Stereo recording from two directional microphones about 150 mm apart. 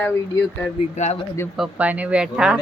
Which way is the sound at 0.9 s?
50° left (ahead or behind).